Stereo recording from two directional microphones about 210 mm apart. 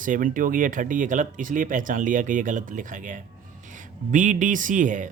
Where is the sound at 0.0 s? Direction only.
40° right (ahead or behind).